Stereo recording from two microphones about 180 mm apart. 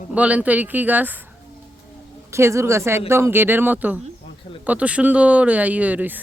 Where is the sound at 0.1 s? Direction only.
10° right (ahead or behind).